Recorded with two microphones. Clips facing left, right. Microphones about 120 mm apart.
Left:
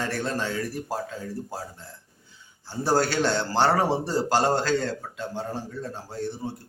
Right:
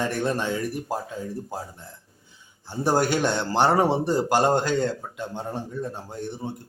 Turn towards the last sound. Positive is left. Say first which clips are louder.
# left 1 dB
turn(degrees=-15)  # may be behind; listen again after turning